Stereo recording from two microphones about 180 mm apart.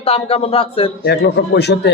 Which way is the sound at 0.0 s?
35° left (ahead or behind).